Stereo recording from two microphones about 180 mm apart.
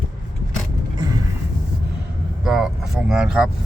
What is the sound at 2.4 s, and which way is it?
Speech, 5° right (ahead or behind).